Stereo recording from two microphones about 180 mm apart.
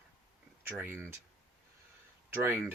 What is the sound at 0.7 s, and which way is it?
Speech, 10° right (ahead or behind).